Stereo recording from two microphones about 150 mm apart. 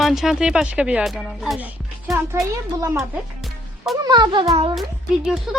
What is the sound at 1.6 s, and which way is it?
A child's voice, 15° right (ahead or behind).